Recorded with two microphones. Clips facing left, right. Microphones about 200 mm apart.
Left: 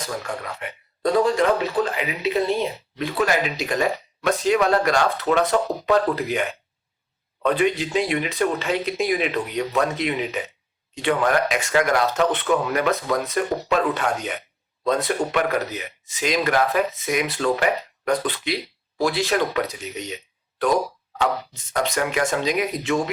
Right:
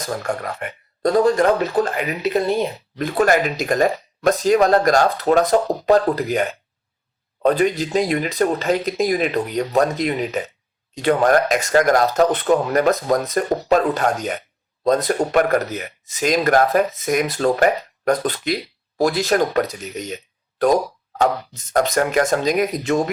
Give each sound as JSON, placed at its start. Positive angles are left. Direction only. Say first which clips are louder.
{"t": 0.0, "sound": "speech", "louder": "right 5 dB", "side_deg": -45}